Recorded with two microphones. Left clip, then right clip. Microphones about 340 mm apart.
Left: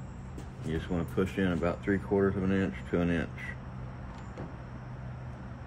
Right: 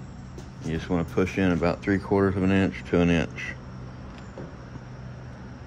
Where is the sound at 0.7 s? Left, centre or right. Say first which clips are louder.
Right 6 dB; right.